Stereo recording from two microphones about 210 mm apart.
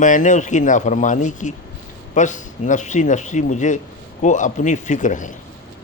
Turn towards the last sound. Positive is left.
turn(degrees=35)  # may be behind; listen again after turning